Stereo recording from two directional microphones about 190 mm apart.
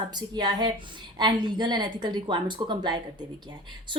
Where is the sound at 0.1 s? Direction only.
20° right (ahead or behind).